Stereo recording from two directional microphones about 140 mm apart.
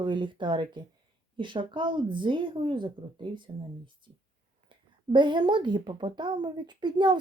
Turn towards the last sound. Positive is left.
turn(degrees=-30)  # may be behind; listen again after turning